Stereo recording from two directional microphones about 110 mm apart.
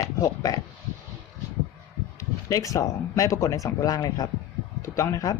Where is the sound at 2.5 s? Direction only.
30° left (ahead or behind).